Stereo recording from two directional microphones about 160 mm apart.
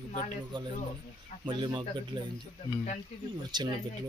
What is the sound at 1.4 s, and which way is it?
Speech, 30° right (ahead or behind).